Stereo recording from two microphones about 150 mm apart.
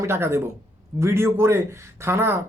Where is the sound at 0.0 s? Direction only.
15° right (ahead or behind).